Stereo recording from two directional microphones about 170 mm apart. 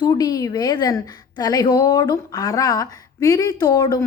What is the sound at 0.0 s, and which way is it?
A woman's voice, 25° left (ahead or behind).